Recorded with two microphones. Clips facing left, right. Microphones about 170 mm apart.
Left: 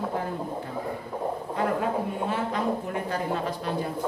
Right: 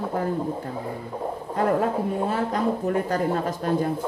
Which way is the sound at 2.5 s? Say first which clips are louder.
Right 4 dB; 45° right (ahead or behind).